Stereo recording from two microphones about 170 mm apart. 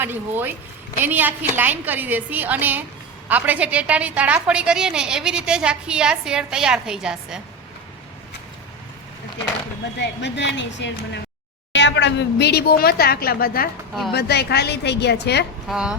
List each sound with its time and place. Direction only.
0.0 s a woman's voice: 10° right (ahead or behind)
10.0 s a woman's voice: 90° left; by 13.7 s 60° left (ahead or behind)
14.1 s speech: 70° left (ahead or behind)
15.7 s a woman's voice: 5° right (ahead or behind)